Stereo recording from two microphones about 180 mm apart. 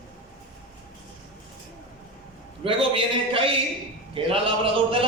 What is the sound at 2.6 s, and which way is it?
A man's voice, 30° right (ahead or behind).